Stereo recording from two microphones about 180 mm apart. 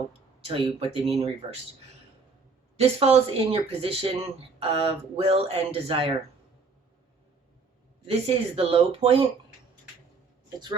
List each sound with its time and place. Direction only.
0.4 s speech: 30° right (ahead or behind)
2.7 s speech: 35° right (ahead or behind)
8.0 s speech: 30° right (ahead or behind)